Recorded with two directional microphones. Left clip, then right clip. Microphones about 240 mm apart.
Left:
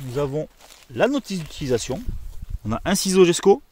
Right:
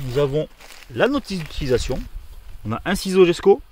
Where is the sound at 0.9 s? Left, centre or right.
Left.